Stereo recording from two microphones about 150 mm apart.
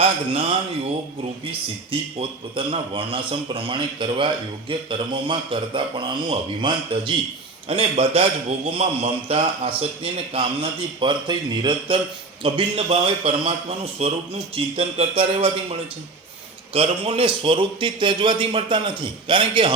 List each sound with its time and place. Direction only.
0.0 s a man's voice: 40° right (ahead or behind)
16.7 s a man's voice: 40° right (ahead or behind)